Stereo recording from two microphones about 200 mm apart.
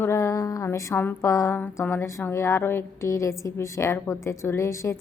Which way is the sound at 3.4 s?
15° left (ahead or behind).